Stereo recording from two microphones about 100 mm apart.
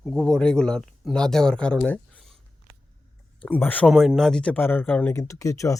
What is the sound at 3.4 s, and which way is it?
Speech, 15° left (ahead or behind).